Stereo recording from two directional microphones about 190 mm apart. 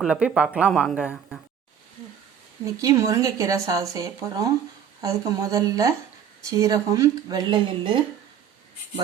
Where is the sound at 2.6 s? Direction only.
15° right (ahead or behind).